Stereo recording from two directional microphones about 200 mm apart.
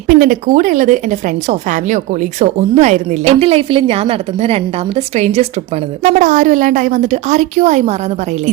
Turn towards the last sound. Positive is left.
turn(degrees=-35)  # may be behind; listen again after turning